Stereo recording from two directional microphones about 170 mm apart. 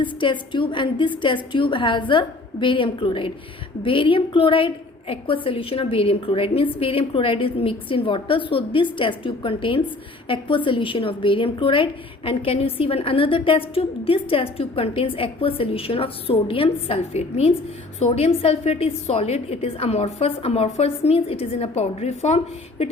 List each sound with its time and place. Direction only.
0.0 s a woman's voice: 30° left (ahead or behind)